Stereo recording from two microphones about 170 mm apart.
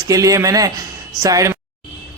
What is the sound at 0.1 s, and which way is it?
Speech, 20° right (ahead or behind).